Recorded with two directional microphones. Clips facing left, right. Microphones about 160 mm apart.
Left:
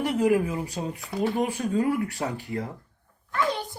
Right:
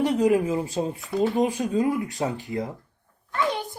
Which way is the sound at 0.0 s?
20° right (ahead or behind).